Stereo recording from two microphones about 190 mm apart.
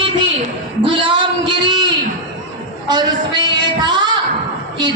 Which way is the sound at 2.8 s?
25° right (ahead or behind).